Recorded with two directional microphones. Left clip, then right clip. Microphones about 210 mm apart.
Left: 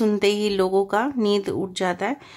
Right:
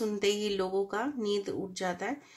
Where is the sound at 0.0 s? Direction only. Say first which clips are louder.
Left 9 dB; 35° left (ahead or behind).